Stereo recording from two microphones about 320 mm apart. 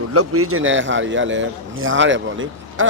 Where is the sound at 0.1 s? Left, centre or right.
Right.